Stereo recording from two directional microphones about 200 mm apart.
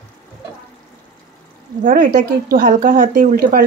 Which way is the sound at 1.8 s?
40° right (ahead or behind).